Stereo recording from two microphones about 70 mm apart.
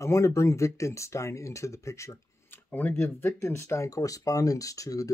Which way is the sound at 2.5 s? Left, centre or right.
Left.